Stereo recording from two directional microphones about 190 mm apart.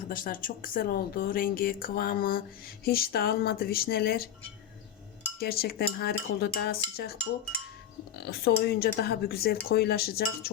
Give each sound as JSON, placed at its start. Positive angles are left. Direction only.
{"t": 0.1, "sound": "speech", "side_deg": 45}
{"t": 5.4, "sound": "speech", "side_deg": 55}
{"t": 8.2, "sound": "speech", "side_deg": 55}